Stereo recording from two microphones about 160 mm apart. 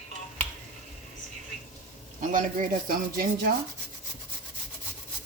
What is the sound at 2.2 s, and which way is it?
Speech, 55° right (ahead or behind).